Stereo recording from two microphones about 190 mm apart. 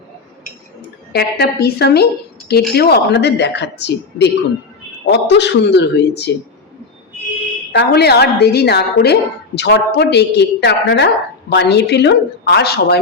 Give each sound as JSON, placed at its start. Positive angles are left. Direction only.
{"t": 1.1, "sound": "a woman's voice", "side_deg": 55}
{"t": 7.7, "sound": "a woman's voice", "side_deg": 60}